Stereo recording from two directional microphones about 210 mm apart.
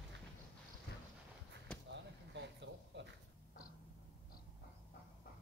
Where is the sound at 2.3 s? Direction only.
60° right (ahead or behind).